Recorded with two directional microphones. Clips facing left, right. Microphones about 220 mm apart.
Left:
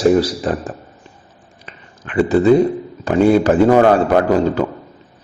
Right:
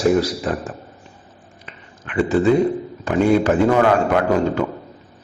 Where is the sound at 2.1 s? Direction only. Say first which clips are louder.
Left 4 dB; 35° left (ahead or behind).